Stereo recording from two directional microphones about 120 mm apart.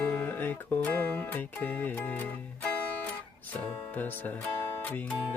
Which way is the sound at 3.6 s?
15° left (ahead or behind).